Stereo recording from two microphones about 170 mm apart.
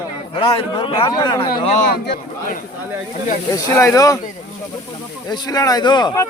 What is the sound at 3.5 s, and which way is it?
Speech, 20° left (ahead or behind).